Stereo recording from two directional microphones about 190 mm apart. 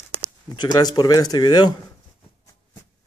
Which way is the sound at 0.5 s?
20° left (ahead or behind).